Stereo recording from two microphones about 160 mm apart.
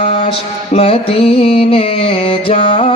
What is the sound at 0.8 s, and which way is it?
Music, 35° left (ahead or behind).